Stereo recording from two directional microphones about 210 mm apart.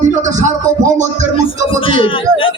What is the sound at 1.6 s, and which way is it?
Speech, 25° left (ahead or behind).